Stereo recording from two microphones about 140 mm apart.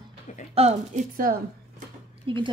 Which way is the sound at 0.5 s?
55° right (ahead or behind).